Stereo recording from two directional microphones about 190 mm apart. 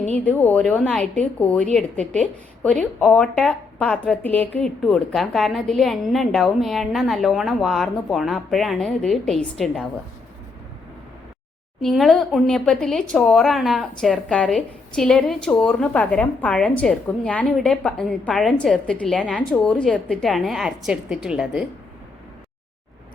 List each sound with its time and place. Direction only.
0.0 s a woman's voice: 10° left (ahead or behind)
11.8 s speech: centre (ahead or behind)